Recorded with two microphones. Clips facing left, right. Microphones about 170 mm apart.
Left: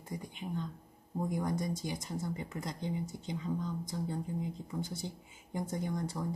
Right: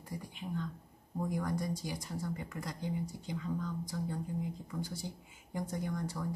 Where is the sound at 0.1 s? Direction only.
20° left (ahead or behind).